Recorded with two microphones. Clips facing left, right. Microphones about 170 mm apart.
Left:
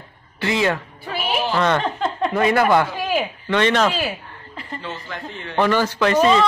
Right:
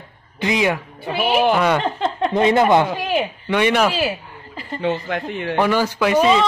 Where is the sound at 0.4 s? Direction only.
15° right (ahead or behind).